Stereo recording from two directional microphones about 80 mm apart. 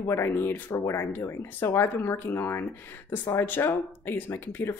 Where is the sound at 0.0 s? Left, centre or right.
Left.